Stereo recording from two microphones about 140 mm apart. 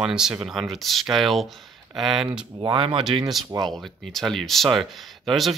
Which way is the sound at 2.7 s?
40° right (ahead or behind).